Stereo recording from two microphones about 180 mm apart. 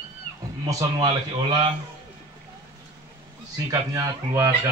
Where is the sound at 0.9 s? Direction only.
25° right (ahead or behind).